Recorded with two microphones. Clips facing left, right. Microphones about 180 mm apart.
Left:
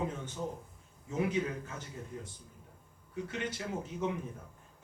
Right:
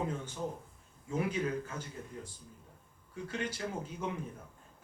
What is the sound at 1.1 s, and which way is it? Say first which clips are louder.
Speech: left 1 dB; 20° left (ahead or behind).